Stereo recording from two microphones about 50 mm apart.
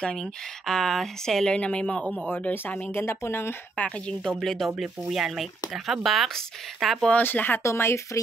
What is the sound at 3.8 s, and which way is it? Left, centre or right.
Speech, left.